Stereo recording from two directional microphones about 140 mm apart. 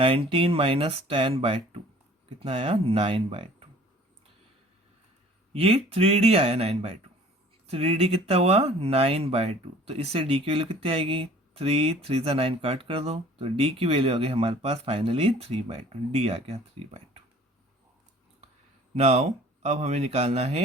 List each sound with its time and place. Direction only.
0.0 s speech: 40° right (ahead or behind)
5.5 s speech: 45° right (ahead or behind)
18.9 s speech: 50° right (ahead or behind)